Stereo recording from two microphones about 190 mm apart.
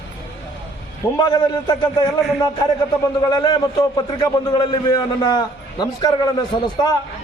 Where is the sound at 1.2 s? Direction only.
20° left (ahead or behind).